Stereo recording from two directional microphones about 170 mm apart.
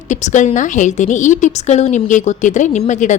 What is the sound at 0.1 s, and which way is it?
A woman's voice, 45° left (ahead or behind).